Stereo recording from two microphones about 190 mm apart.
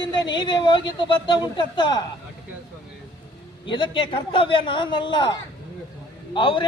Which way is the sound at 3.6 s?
25° left (ahead or behind).